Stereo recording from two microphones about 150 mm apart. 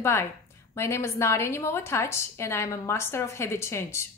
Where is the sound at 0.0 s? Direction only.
20° left (ahead or behind).